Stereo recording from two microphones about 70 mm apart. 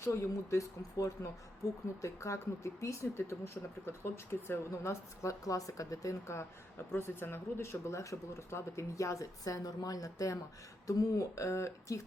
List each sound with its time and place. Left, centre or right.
0.0 s speech: left